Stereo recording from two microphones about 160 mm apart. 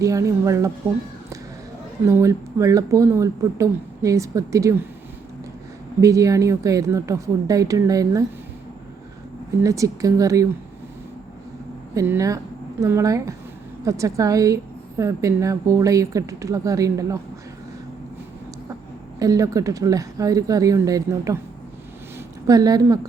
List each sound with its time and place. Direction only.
0.0 s a woman's voice: 20° right (ahead or behind)
2.0 s a woman's voice: 20° right (ahead or behind)
6.0 s a woman's voice: 20° right (ahead or behind)
9.6 s a woman's voice: 20° right (ahead or behind)
11.9 s a woman's voice: 20° right (ahead or behind)
19.2 s a woman's voice: 20° right (ahead or behind)
22.4 s a woman's voice: 20° right (ahead or behind)